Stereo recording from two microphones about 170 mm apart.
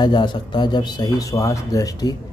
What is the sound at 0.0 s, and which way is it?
Speech, 25° left (ahead or behind).